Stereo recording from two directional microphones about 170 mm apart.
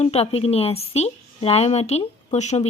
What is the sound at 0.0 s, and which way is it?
A woman's voice, 35° left (ahead or behind).